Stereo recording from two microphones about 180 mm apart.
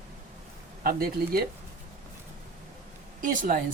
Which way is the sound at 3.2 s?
50° right (ahead or behind).